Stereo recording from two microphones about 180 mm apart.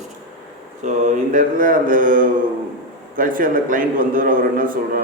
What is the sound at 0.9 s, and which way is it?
A man's voice, 45° right (ahead or behind).